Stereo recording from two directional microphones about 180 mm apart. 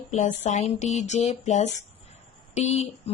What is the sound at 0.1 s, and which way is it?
Speech, 40° left (ahead or behind).